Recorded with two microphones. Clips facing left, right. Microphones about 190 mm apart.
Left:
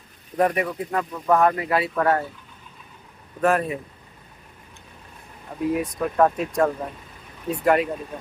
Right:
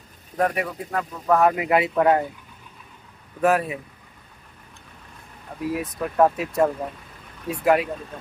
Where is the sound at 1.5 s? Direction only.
20° right (ahead or behind).